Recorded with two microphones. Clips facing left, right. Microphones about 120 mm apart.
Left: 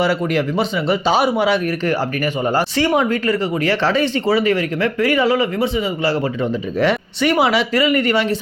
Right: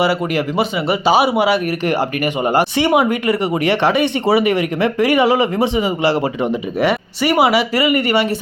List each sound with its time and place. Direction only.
0.0 s speech: 5° right (ahead or behind)
1.8 s speech: 15° right (ahead or behind)
6.7 s speech: 10° right (ahead or behind)